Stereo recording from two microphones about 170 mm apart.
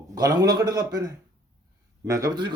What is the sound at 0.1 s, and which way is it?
Speech, 20° right (ahead or behind).